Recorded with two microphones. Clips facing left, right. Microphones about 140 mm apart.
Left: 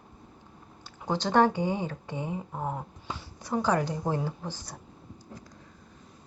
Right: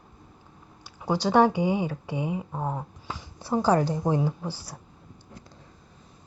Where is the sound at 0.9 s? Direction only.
10° right (ahead or behind).